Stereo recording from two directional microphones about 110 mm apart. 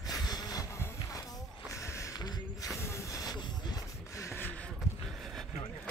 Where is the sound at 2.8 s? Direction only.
30° left (ahead or behind).